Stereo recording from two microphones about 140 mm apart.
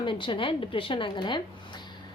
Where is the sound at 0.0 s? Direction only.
40° left (ahead or behind).